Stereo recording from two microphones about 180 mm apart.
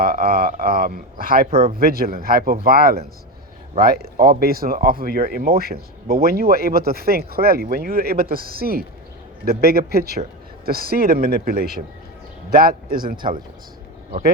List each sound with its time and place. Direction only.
0.0 s speech: 55° right (ahead or behind)